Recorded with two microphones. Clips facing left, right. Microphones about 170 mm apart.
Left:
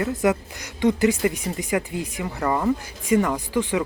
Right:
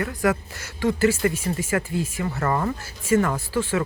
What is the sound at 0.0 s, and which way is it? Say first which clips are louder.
Speech: left 2 dB; 20° left (ahead or behind).